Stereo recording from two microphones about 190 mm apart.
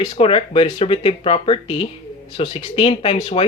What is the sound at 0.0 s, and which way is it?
Speech, 30° left (ahead or behind).